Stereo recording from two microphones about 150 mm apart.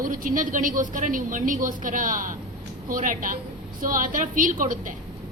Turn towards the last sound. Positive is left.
turn(degrees=-65)  # may be behind; listen again after turning